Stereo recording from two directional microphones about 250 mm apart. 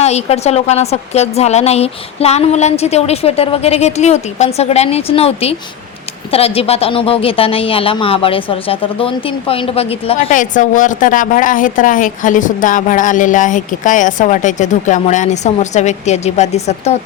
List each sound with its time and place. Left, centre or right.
0.0 s speech: left